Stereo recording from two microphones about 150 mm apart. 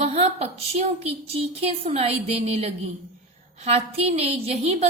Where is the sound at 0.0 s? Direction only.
45° right (ahead or behind).